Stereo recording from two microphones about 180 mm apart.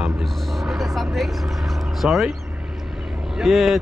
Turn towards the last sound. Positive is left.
turn(degrees=0)  # may be behind; listen again after turning